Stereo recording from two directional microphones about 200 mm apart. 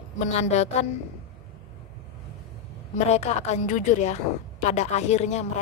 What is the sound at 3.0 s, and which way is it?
Speech, 35° left (ahead or behind).